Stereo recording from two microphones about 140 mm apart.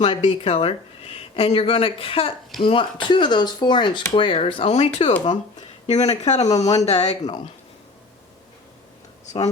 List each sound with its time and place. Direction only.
0.0 s speech: 55° left (ahead or behind)
7.2 s speech: 30° left (ahead or behind)